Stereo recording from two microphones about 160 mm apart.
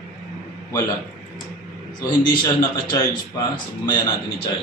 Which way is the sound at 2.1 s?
25° left (ahead or behind).